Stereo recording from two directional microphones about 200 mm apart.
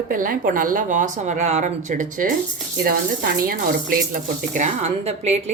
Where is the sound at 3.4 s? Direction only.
45° right (ahead or behind).